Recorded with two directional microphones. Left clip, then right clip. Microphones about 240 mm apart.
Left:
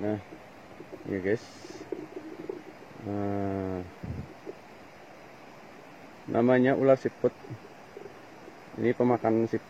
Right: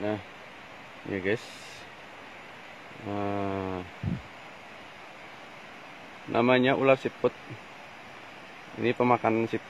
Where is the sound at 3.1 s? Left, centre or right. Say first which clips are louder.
Right 1 dB; right.